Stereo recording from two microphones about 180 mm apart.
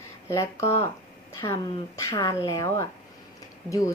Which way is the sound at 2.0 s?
15° left (ahead or behind).